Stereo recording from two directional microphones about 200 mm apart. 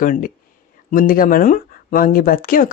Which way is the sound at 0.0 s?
45° left (ahead or behind).